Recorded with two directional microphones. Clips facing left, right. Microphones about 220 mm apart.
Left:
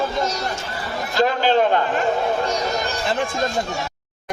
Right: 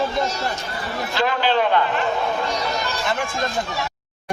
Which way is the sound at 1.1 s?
45° left (ahead or behind).